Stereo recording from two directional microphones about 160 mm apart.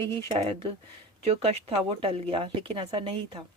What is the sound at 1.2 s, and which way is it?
Speech, 40° right (ahead or behind).